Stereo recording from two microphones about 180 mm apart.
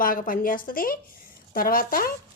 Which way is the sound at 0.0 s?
50° left (ahead or behind).